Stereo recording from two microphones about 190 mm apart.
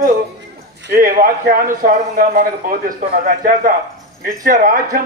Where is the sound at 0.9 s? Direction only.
45° right (ahead or behind).